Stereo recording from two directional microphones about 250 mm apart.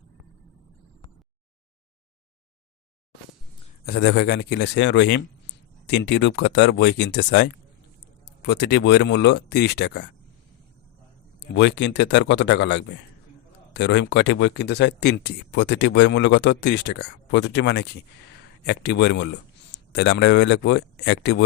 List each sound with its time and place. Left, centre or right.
3.8 s speech: left
11.3 s a man's voice: left